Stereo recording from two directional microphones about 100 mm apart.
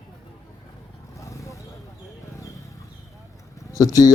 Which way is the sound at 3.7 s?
35° left (ahead or behind).